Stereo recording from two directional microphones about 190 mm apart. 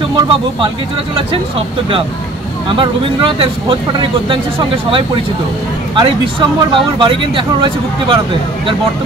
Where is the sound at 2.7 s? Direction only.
25° right (ahead or behind).